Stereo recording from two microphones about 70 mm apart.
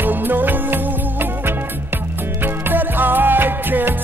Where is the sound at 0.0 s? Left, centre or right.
Right.